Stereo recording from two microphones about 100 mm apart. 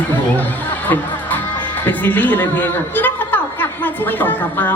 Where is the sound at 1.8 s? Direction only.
15° left (ahead or behind).